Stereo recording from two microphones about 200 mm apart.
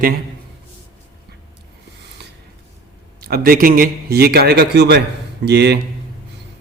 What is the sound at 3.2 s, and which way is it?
A man's voice, 50° right (ahead or behind).